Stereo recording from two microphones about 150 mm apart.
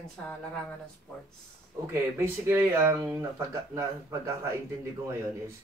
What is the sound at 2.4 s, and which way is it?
Speech, 15° right (ahead or behind).